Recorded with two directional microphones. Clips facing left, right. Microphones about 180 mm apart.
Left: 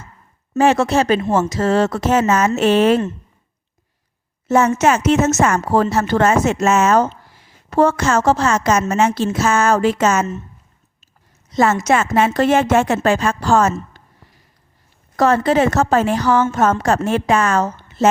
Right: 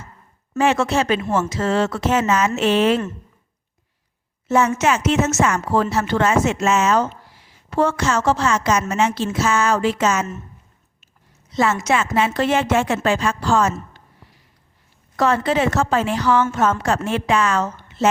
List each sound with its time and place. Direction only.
0.5 s speech: 40° left (ahead or behind)
4.4 s a woman's voice: 45° left (ahead or behind)
11.5 s speech: 45° left (ahead or behind)
15.1 s speech: 40° left (ahead or behind)
17.8 s a sound: 40° left (ahead or behind)